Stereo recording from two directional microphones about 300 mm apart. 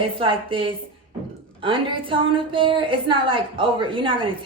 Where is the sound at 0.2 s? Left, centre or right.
Centre.